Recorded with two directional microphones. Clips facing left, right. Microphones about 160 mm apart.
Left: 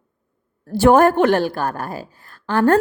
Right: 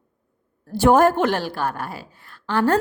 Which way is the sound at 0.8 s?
65° left (ahead or behind).